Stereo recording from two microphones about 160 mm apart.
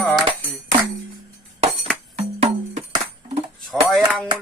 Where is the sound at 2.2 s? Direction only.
40° right (ahead or behind).